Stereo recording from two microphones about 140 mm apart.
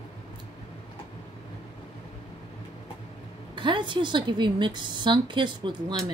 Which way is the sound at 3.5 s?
35° right (ahead or behind).